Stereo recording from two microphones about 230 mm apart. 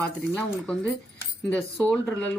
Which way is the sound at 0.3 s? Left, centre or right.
Centre.